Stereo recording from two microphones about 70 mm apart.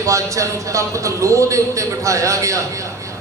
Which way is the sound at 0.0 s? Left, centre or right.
Right.